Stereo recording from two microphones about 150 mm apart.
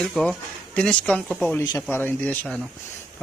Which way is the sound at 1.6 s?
25° left (ahead or behind).